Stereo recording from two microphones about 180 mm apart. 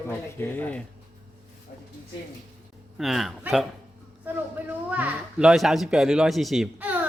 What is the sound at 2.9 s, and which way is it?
Speech, centre (ahead or behind).